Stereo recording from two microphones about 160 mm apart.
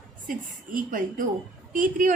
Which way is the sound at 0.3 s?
60° right (ahead or behind).